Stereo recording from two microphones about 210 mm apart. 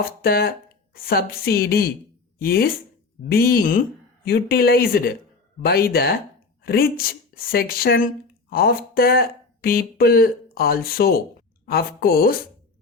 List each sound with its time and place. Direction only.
0.0 s speech: 45° left (ahead or behind)